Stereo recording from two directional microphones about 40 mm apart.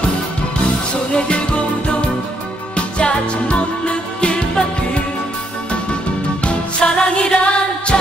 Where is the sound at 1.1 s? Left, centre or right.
Left.